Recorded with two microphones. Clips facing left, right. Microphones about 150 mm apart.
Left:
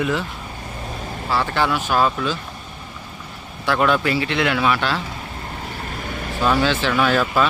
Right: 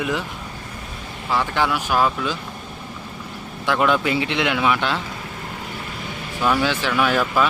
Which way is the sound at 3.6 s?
15° right (ahead or behind).